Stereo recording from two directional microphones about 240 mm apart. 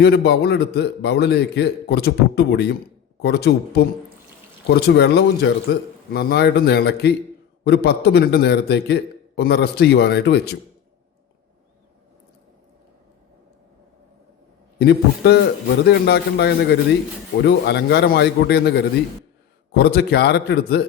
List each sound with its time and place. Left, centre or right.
0.0 s a man's voice: left
14.8 s a man's voice: left